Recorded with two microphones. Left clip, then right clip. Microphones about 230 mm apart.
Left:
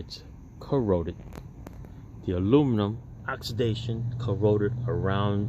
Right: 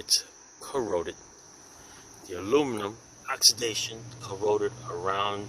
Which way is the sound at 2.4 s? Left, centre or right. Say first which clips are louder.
Left 2 dB; centre.